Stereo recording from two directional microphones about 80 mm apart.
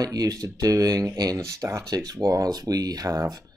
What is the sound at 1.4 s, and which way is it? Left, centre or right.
Speech, right.